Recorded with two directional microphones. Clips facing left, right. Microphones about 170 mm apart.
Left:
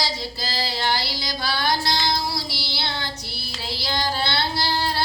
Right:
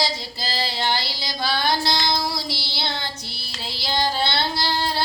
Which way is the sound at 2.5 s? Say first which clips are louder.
Right 1 dB; 20° right (ahead or behind).